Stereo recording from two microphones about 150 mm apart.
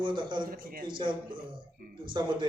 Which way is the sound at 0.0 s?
30° right (ahead or behind).